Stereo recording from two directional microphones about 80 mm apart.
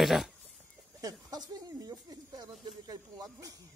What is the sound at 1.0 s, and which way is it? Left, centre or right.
Speech, right.